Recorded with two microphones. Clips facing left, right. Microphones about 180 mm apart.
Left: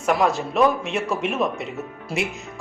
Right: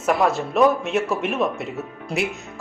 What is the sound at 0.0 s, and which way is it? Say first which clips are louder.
Speech: right 1 dB; centre (ahead or behind).